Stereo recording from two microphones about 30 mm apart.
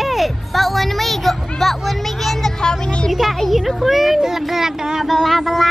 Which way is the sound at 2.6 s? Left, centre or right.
Left.